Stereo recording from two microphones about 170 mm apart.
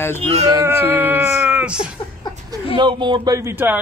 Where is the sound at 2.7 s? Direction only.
30° right (ahead or behind).